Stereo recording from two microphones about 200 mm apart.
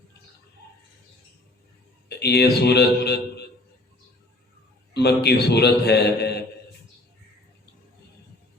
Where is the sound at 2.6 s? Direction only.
55° left (ahead or behind).